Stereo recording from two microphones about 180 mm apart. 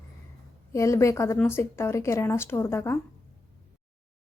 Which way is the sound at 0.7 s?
15° left (ahead or behind).